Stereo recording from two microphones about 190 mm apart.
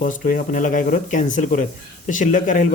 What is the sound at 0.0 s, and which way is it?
Speech, 45° left (ahead or behind).